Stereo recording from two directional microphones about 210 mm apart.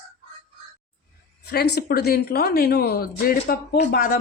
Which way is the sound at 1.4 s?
50° left (ahead or behind).